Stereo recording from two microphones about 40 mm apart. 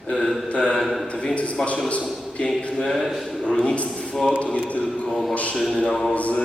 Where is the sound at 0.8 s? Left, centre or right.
Centre.